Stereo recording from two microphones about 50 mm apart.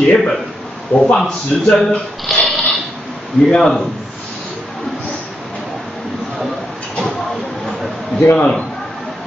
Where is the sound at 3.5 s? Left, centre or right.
Centre.